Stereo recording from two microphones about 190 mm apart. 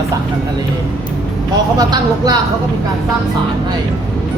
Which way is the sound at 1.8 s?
20° right (ahead or behind).